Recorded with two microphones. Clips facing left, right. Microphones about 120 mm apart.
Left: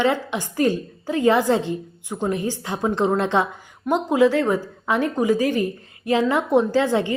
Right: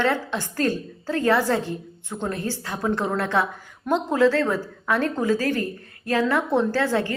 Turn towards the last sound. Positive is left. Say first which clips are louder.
# left 3 dB
turn(degrees=20)  # may be behind; listen again after turning